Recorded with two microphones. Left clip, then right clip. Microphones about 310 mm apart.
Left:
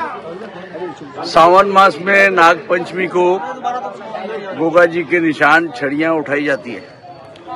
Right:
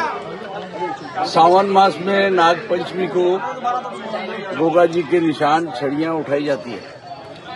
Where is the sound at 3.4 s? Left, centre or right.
Left.